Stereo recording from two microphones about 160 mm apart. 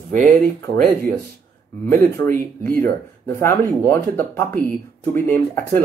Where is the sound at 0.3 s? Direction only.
10° left (ahead or behind).